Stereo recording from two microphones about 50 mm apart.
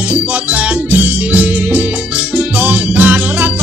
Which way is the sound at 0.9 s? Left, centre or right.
Right.